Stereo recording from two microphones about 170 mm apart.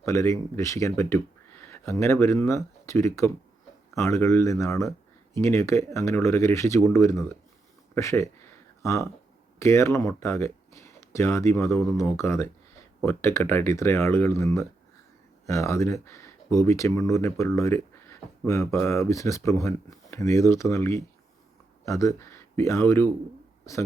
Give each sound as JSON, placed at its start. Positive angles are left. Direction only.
{"t": 0.0, "sound": "speech", "side_deg": 15}